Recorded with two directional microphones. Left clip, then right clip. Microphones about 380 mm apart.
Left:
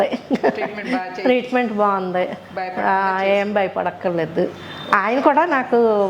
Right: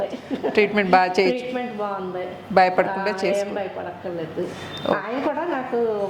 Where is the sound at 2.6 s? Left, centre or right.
Right.